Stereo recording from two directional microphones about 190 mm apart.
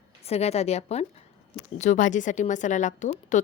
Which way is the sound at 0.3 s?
35° left (ahead or behind).